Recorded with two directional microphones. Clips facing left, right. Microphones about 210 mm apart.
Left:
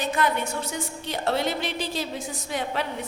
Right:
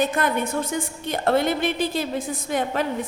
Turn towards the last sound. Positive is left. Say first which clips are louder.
# right 5 dB
turn(degrees=-50)  # may be behind; listen again after turning